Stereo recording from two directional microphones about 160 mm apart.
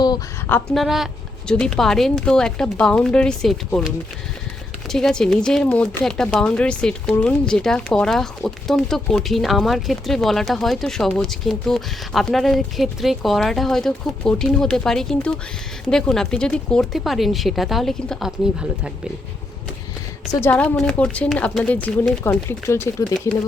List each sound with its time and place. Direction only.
0.7 s speech: centre (ahead or behind)
20.3 s speech: 10° left (ahead or behind)